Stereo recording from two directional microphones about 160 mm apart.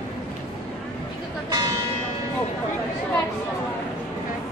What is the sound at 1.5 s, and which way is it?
Church bell, 25° right (ahead or behind).